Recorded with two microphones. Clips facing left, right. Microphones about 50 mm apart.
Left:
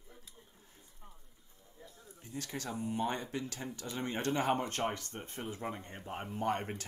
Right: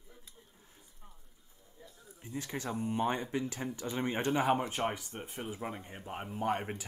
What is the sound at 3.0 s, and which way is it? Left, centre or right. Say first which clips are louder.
Speech: right 4 dB; right.